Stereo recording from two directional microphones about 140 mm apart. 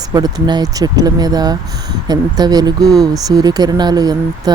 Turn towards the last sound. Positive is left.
turn(degrees=-30)  # may be behind; listen again after turning